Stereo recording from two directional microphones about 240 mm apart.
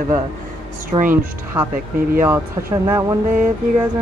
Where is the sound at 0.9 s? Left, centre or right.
Right.